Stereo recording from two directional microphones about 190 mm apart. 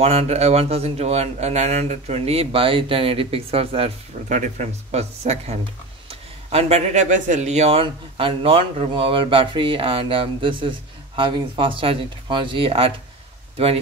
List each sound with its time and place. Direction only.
0.0 s a man's voice: 35° right (ahead or behind)